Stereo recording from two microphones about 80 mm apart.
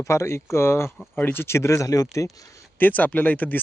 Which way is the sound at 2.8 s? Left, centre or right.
Left.